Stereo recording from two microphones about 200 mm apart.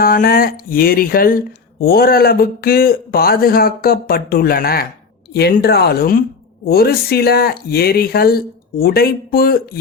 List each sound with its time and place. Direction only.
0.0 s speech: 45° left (ahead or behind)